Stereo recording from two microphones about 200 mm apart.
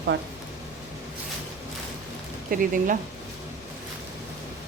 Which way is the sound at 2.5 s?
45° right (ahead or behind).